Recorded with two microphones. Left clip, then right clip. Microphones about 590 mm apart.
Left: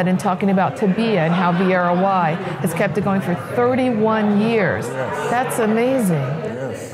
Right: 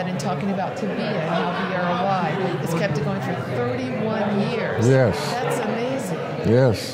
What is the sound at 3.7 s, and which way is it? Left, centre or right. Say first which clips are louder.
Speech: left 7 dB; left.